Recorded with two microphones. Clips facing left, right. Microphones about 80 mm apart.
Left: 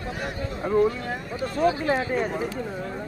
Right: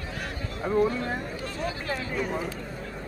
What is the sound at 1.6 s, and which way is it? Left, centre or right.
Speech, left.